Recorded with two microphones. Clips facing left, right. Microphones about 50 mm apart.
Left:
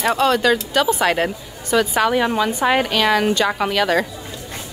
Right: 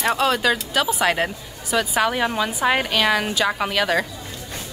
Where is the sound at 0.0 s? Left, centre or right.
Centre.